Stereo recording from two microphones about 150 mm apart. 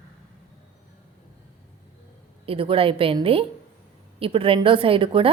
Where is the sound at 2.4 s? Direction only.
40° right (ahead or behind).